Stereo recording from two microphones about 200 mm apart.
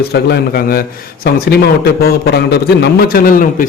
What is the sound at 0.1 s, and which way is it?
A man's voice, 50° left (ahead or behind).